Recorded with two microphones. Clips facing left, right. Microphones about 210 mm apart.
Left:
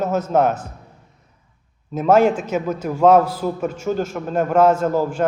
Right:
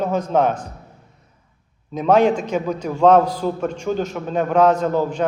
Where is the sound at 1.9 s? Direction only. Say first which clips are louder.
Even; 5° left (ahead or behind).